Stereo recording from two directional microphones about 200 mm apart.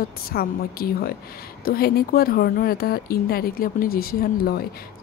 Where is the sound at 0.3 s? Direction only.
50° left (ahead or behind).